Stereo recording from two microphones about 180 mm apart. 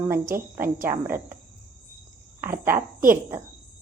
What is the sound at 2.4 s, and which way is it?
Speech, 15° right (ahead or behind).